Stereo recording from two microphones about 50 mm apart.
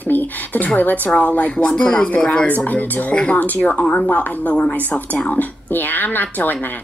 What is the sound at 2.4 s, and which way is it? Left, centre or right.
Speech, left.